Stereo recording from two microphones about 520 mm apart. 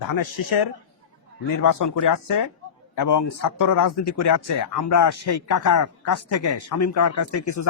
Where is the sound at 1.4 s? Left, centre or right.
Left.